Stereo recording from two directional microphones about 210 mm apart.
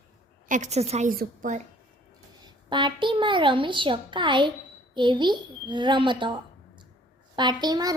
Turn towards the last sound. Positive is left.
turn(degrees=-20)  # may be behind; listen again after turning